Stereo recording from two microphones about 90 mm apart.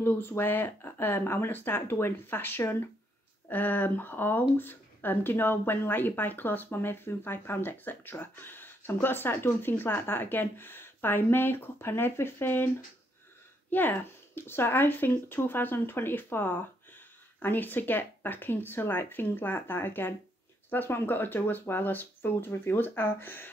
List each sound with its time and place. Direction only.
0.0 s speech: 25° left (ahead or behind)